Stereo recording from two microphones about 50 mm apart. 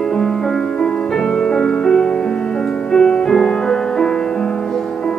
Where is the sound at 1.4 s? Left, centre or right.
Centre.